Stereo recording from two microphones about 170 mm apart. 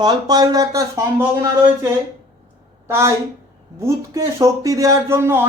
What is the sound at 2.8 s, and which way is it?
Speech, 15° right (ahead or behind).